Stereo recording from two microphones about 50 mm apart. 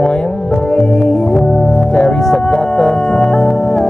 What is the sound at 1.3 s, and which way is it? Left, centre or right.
Organ, centre.